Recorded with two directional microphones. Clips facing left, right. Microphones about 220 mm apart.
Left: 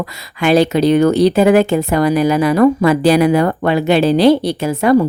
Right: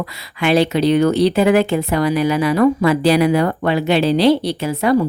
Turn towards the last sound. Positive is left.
turn(degrees=50)  # may be behind; listen again after turning